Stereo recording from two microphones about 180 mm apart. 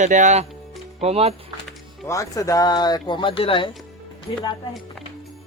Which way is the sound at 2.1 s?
20° left (ahead or behind).